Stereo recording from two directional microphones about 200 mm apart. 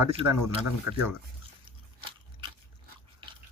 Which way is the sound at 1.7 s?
25° right (ahead or behind).